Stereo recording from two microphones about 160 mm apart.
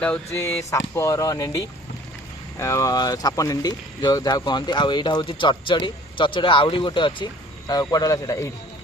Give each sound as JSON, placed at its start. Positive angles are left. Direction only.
{"t": 0.0, "sound": "speech", "side_deg": 10}